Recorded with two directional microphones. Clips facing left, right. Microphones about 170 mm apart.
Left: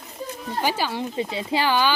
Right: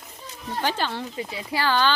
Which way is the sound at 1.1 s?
25° left (ahead or behind).